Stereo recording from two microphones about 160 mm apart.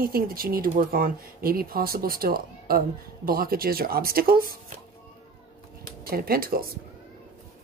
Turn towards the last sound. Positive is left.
turn(degrees=-70)  # may be behind; listen again after turning